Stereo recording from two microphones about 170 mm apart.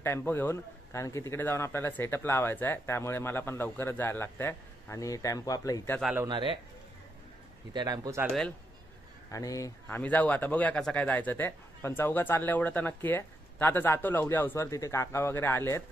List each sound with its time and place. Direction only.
0.0 s speech: 15° left (ahead or behind)
6.2 s speech: 30° right (ahead or behind)
7.7 s speech: 25° right (ahead or behind)
8.3 s speech: 5° left (ahead or behind)
9.3 s speech: 20° left (ahead or behind)